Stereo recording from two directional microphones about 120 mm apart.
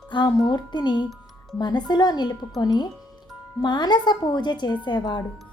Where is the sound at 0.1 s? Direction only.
35° left (ahead or behind).